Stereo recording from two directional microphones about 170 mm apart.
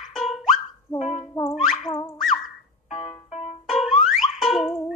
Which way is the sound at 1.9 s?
15° left (ahead or behind).